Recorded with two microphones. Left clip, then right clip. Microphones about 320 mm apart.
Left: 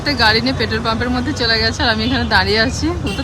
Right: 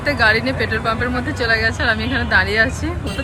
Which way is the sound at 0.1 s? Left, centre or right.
Centre.